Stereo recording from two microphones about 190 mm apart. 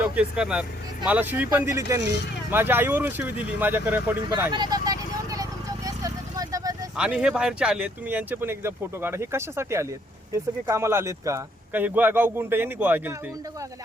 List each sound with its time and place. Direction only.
0.0 s speech: 5° right (ahead or behind)
4.5 s a sound: 20° right (ahead or behind)
6.9 s speech: 5° right (ahead or behind)